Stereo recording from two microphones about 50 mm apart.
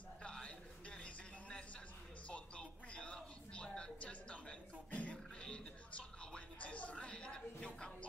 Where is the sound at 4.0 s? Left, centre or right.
Left.